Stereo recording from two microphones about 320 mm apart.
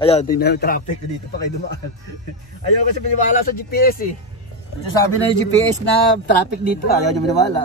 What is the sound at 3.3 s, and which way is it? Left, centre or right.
Speech, left.